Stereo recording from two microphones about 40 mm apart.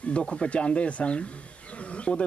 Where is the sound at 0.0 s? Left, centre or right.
Left.